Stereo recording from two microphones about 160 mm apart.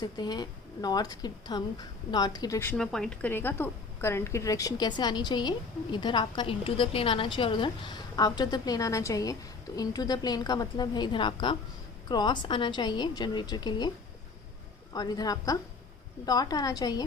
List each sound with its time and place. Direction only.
0.0 s a woman's voice: 25° left (ahead or behind)
2.7 s a woman's voice: 5° left (ahead or behind); by 13.9 s 25° left (ahead or behind)
14.9 s a woman's voice: 25° left (ahead or behind)